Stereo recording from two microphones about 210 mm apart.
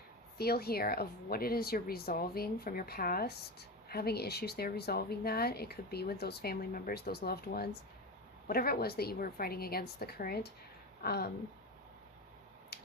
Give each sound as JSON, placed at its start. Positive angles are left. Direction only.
{"t": 0.3, "sound": "a woman's voice", "side_deg": 50}
{"t": 11.0, "sound": "a sound", "side_deg": 50}
{"t": 12.7, "sound": "mechanisms", "side_deg": 50}